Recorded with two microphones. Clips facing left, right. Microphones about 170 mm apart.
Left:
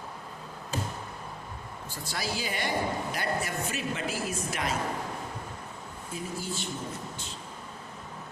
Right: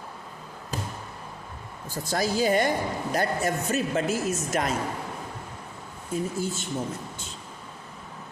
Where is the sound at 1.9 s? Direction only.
45° right (ahead or behind).